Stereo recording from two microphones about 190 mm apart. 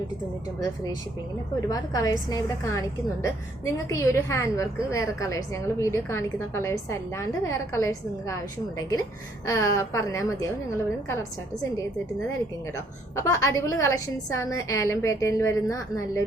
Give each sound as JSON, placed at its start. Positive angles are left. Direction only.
{"t": 1.6, "sound": "a woman's voice", "side_deg": 20}
{"t": 9.5, "sound": "a woman's voice", "side_deg": 15}
{"t": 13.1, "sound": "a woman's voice", "side_deg": 15}